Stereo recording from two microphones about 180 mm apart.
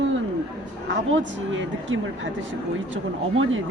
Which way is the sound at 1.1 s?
90° right.